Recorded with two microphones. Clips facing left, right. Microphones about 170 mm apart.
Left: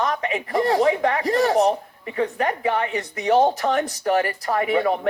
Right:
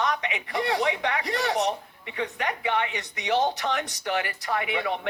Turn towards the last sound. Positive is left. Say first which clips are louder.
# left 7 dB
turn(degrees=40)  # may be behind; listen again after turning